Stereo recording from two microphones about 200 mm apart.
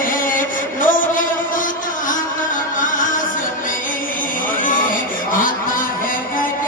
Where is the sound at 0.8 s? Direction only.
40° left (ahead or behind).